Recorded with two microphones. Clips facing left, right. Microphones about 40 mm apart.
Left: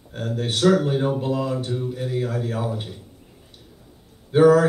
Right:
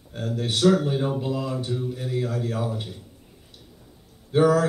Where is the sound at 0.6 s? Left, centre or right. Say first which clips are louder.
Left 2 dB; centre.